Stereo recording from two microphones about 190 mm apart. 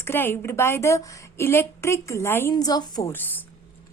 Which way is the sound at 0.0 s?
10° left (ahead or behind).